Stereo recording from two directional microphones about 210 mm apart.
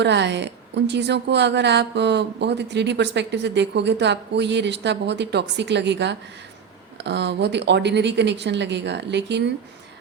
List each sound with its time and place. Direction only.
0.0 s a woman's voice: 55° right (ahead or behind)